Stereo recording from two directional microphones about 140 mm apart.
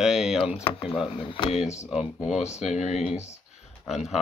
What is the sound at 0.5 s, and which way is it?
Speech, 40° left (ahead or behind).